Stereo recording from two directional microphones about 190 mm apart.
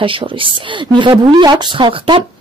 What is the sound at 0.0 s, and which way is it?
A woman's voice, 25° right (ahead or behind).